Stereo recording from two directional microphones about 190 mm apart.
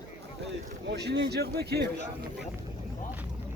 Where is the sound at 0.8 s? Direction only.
65° right (ahead or behind).